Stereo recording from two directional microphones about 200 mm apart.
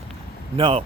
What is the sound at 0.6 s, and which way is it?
Speech, 25° right (ahead or behind).